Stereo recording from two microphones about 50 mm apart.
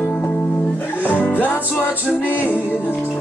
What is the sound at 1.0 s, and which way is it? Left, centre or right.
Music, left.